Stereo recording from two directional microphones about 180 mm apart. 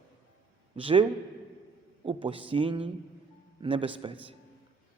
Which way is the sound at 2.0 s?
30° right (ahead or behind).